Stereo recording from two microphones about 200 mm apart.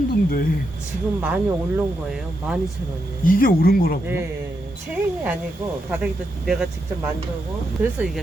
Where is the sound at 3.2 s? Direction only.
45° left (ahead or behind).